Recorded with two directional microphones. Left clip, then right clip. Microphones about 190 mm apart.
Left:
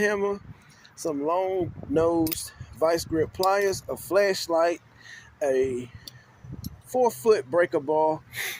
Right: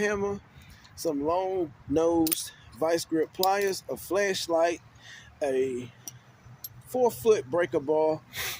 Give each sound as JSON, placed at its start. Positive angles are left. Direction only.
{"t": 0.0, "sound": "speech", "side_deg": 5}
{"t": 6.9, "sound": "speech", "side_deg": 5}